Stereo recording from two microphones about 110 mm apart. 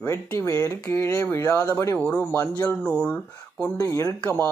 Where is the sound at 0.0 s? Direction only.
20° left (ahead or behind).